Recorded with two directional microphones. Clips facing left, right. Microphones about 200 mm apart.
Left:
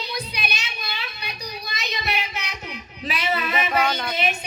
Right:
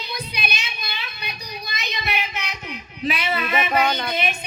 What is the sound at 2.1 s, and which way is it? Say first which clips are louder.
Child singing: right 2 dB; 35° left (ahead or behind).